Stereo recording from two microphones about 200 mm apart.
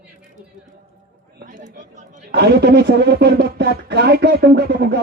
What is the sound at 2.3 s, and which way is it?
Speech, 55° right (ahead or behind).